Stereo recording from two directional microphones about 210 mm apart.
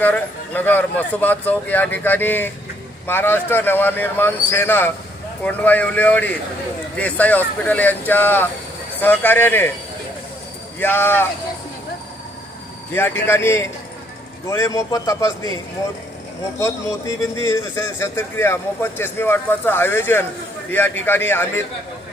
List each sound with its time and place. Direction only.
0.0 s speech: 10° left (ahead or behind)
10.8 s speech: 10° left (ahead or behind)
12.9 s speech: 10° left (ahead or behind)
17.4 s speech: 15° left (ahead or behind)